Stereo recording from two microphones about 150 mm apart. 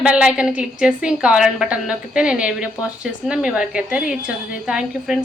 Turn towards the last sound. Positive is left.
turn(degrees=-5)  # may be behind; listen again after turning